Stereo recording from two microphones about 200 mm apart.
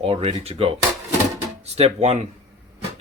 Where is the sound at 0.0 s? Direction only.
30° right (ahead or behind).